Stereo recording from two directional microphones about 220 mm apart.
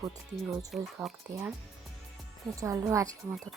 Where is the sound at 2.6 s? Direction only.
15° right (ahead or behind).